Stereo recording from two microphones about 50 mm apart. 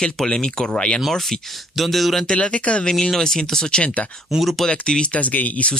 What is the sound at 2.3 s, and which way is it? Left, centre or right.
Speech, left.